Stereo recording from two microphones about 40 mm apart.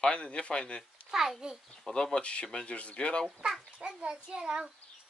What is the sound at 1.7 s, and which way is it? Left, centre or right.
Speech, left.